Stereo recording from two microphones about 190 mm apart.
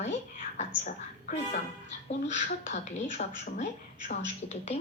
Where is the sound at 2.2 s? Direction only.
35° left (ahead or behind).